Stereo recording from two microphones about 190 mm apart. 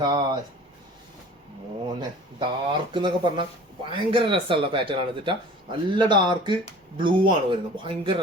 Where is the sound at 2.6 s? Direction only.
25° right (ahead or behind).